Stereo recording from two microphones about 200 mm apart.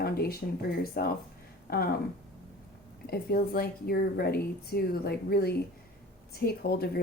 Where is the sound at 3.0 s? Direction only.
50° left (ahead or behind).